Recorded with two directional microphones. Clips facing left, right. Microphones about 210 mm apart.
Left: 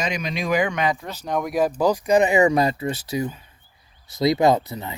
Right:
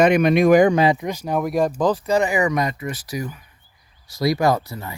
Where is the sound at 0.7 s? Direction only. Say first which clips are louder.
Right 6 dB; 30° right (ahead or behind).